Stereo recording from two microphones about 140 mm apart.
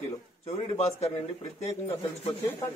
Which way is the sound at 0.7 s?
50° left (ahead or behind).